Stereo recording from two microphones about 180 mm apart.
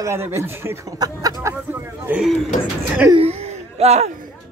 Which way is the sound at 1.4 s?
10° right (ahead or behind).